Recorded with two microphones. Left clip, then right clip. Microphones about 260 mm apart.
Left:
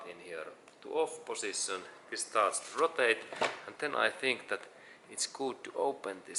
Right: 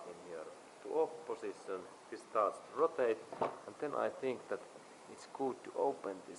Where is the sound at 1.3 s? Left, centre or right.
Centre.